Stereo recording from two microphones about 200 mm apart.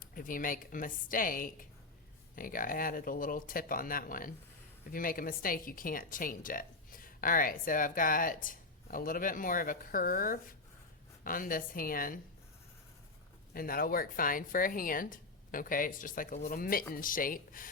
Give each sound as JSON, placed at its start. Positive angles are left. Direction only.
{"t": 0.0, "sound": "a woman's voice", "side_deg": 45}
{"t": 13.5, "sound": "a woman's voice", "side_deg": 45}